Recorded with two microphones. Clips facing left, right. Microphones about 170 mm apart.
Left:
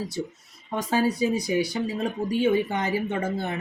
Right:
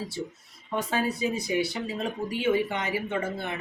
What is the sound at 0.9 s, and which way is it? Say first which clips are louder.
Speech: left 6 dB; 35° left (ahead or behind).